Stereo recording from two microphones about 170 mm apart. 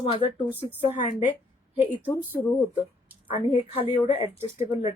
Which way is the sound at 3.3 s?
35° left (ahead or behind).